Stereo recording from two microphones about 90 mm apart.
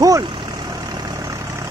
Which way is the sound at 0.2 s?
60° right (ahead or behind).